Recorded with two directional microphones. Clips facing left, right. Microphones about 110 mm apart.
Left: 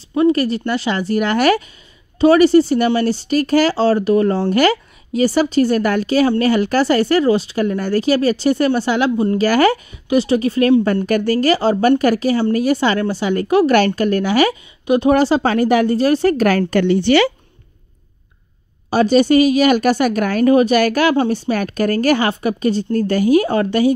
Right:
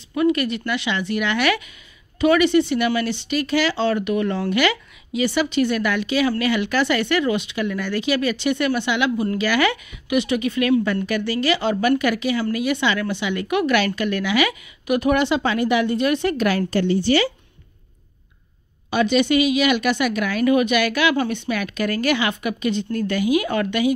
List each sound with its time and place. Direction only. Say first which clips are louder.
0.1 s speech: left 5 dB; 35° left (ahead or behind)
9.4 s speech: left 8 dB; 40° left (ahead or behind)
16.8 s speech: left 5 dB; 70° left (ahead or behind)
18.9 s speech: left 6 dB; 35° left (ahead or behind)